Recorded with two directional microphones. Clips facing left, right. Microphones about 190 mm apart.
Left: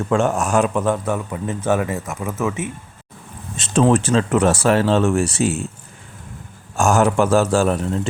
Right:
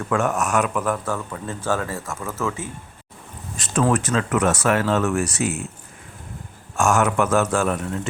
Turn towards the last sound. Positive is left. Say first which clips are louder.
# left 4 dB
turn(degrees=30)  # may be behind; listen again after turning